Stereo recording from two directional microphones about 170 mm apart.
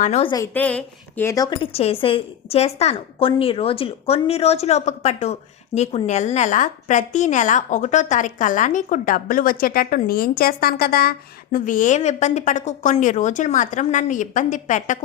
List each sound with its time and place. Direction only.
0.0 s a woman's voice: 40° left (ahead or behind)
0.3 s a woman's voice: 20° left (ahead or behind)
0.5 s speech: 5° left (ahead or behind)
1.7 s a woman's voice: 35° left (ahead or behind); by 11.1 s 65° left (ahead or behind)
11.5 s a woman's voice: 50° left (ahead or behind)